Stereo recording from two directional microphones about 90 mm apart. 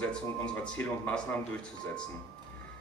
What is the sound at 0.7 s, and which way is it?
Speech, 15° left (ahead or behind).